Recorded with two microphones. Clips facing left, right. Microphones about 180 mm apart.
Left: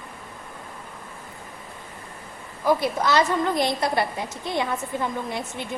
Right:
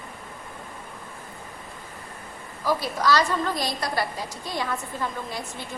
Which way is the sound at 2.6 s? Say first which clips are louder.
Left 3 dB; 20° left (ahead or behind).